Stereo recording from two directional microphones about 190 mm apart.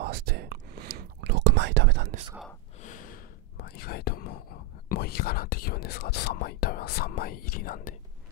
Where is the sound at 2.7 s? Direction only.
40° left (ahead or behind).